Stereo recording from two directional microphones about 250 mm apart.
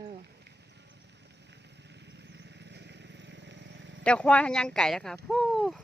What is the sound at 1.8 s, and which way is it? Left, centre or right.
Vehicle, right.